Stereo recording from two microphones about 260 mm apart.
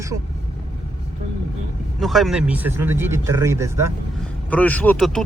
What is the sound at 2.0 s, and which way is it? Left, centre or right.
Speech, centre.